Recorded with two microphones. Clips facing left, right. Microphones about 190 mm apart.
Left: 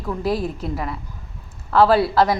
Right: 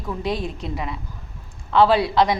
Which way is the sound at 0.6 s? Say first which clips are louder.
Left 2 dB; 20° right (ahead or behind).